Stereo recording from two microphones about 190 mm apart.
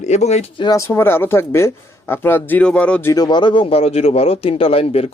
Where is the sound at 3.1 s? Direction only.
20° left (ahead or behind).